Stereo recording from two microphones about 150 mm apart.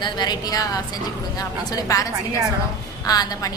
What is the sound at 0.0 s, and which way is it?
A woman's voice, 30° left (ahead or behind).